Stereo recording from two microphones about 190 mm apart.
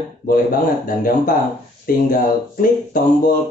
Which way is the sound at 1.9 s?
50° left (ahead or behind).